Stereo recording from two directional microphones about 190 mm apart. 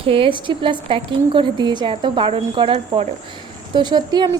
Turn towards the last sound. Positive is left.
turn(degrees=-20)  # may be behind; listen again after turning